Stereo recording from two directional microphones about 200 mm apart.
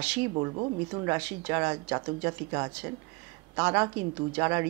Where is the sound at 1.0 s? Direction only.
15° right (ahead or behind).